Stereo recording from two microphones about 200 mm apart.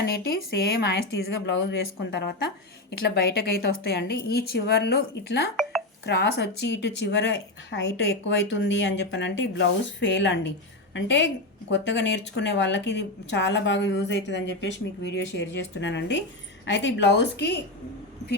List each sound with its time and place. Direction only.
0.0 s a woman's voice: 50° left (ahead or behind)